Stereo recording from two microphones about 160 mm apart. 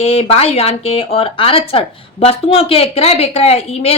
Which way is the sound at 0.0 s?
40° left (ahead or behind).